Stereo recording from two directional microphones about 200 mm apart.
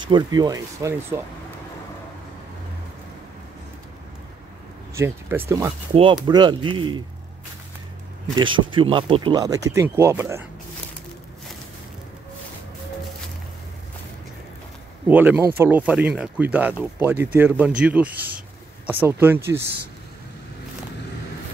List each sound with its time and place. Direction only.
0.1 s speech: 20° right (ahead or behind)
4.9 s speech: 10° right (ahead or behind)
8.4 s speech: 25° right (ahead or behind)
15.0 s speech: 10° right (ahead or behind)